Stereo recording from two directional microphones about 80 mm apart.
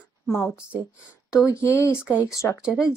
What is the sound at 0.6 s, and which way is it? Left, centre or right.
Speech, centre.